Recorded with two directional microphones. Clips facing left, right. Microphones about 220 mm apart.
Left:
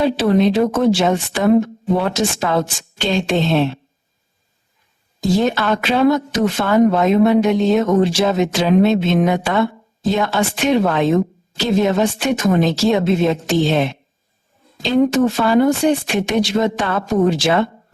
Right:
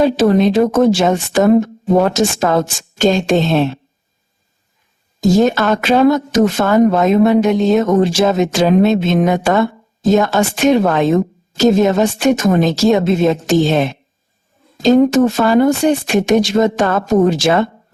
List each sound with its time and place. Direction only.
0.0 s a woman's voice: 45° right (ahead or behind)
5.2 s a woman's voice: 45° right (ahead or behind)